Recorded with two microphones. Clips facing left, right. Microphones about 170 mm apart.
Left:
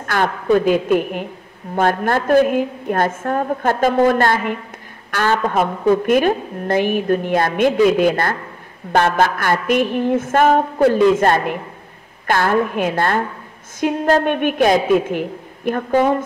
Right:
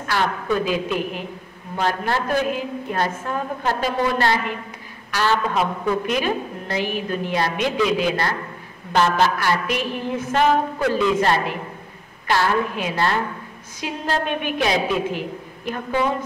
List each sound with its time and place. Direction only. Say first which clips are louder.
0.0 s a woman's voice: left 3 dB; 50° left (ahead or behind)